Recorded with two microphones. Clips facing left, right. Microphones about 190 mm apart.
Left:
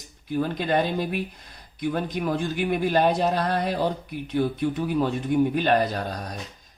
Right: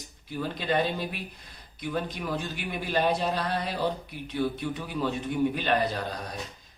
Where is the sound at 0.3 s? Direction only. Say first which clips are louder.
Left 5 dB; 50° left (ahead or behind).